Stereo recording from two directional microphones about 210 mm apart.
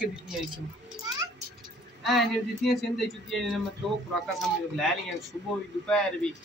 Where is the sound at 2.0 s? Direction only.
Centre (ahead or behind).